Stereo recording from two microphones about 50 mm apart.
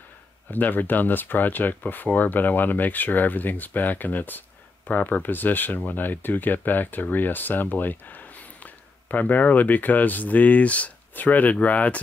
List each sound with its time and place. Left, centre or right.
0.5 s speech: left